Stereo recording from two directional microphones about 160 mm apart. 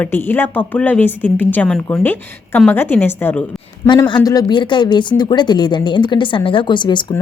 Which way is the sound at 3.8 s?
25° left (ahead or behind).